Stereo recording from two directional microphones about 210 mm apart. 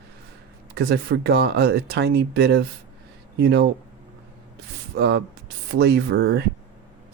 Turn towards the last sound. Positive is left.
turn(degrees=-50)  # may be behind; listen again after turning